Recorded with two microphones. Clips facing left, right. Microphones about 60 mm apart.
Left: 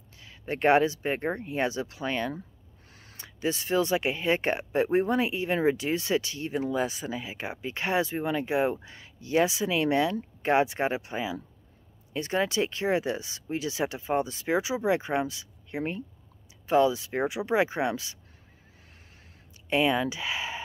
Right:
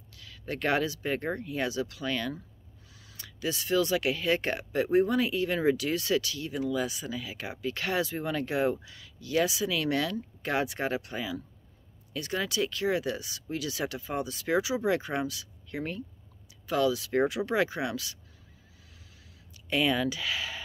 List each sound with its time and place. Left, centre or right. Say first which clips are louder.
0.2 s speech: left 6 dB; left
19.7 s speech: left 2 dB; left